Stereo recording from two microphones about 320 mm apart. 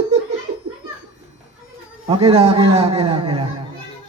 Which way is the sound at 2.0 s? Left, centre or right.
Centre.